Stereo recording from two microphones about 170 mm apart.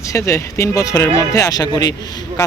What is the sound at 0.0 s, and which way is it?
Speech, 20° left (ahead or behind).